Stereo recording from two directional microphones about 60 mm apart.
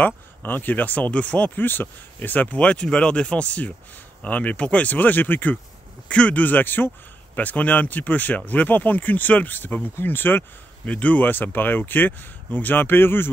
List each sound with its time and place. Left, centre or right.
0.0 s speech: left
6.0 s speech: left
10.9 s speech: left